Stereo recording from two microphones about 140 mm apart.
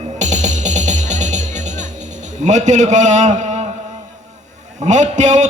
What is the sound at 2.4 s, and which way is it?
A man's voice, 55° right (ahead or behind).